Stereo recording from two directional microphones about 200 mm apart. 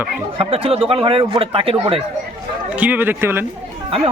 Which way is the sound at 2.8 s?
10° right (ahead or behind).